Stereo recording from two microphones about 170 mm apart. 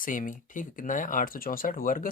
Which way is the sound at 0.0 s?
55° left (ahead or behind).